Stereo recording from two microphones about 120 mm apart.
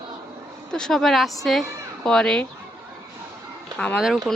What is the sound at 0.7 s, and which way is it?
Speech, 5° left (ahead or behind).